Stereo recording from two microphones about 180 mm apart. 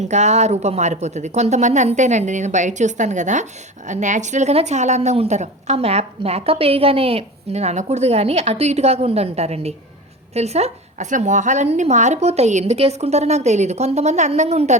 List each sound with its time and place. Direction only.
0.0 s a woman's voice: 40° right (ahead or behind)